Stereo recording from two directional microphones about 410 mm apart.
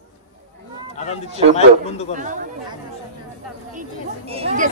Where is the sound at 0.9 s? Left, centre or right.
Centre.